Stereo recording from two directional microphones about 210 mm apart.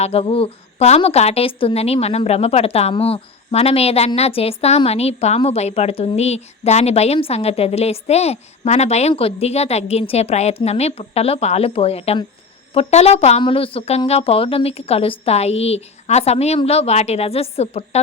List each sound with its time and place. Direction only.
0.0 s a woman's voice: 30° left (ahead or behind)